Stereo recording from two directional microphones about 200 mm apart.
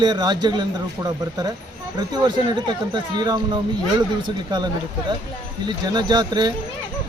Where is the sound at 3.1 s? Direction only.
20° right (ahead or behind).